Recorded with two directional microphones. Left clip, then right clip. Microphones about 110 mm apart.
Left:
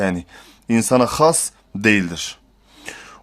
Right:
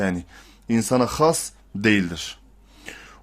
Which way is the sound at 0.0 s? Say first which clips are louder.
Left 4 dB; 25° left (ahead or behind).